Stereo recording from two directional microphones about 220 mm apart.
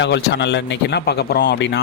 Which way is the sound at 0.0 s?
50° left (ahead or behind).